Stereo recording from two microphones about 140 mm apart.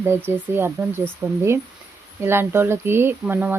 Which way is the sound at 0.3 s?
15° right (ahead or behind).